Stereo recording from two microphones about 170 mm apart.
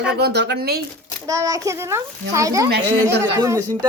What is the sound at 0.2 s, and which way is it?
Speech, 80° right.